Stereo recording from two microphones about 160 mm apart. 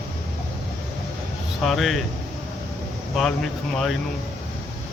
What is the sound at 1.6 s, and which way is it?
Speech, centre (ahead or behind).